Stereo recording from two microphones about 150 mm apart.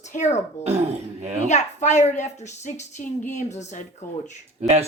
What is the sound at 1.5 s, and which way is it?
A woman's voice, 50° left (ahead or behind).